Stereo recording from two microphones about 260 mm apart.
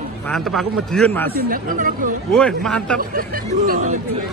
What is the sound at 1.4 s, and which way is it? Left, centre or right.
Speech, right.